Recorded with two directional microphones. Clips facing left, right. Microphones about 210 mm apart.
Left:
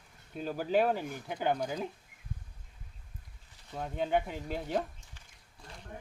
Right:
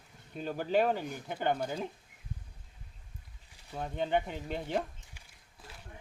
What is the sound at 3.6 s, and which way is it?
Speech, centre (ahead or behind).